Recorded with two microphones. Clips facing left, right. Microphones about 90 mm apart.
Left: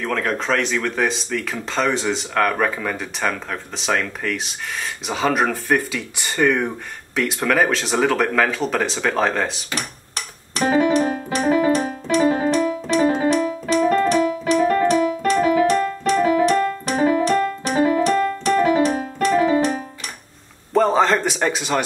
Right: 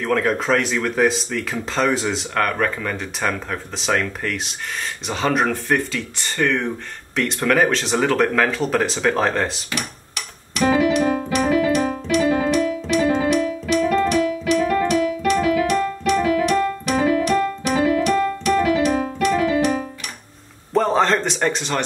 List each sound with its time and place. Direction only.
0.0 s speech: centre (ahead or behind)
9.8 s music: 35° left (ahead or behind)
19.1 s keyboard: 40° left (ahead or behind)
20.7 s a sound: centre (ahead or behind)